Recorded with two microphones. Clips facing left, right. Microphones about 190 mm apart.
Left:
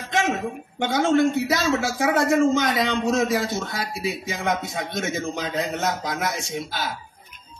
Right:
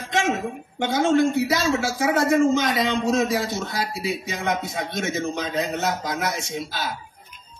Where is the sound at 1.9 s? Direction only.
25° right (ahead or behind).